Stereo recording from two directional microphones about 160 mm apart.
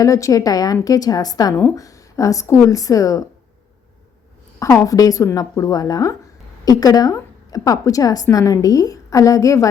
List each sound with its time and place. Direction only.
0.0 s a woman's voice: 20° left (ahead or behind)
4.6 s a woman's voice: 20° left (ahead or behind)